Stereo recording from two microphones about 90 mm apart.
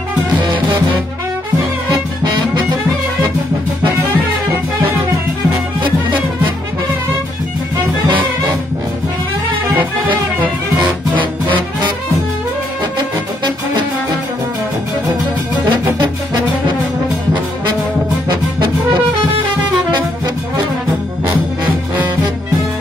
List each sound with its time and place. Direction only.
0.4 s music: 70° right (ahead or behind)
5.8 s music: 65° right (ahead or behind)
11.1 s music: 65° right (ahead or behind)
18.3 s music: 60° right (ahead or behind)